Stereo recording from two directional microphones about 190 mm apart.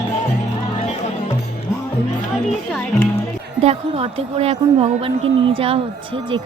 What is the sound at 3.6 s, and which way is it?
A woman's voice, 30° right (ahead or behind).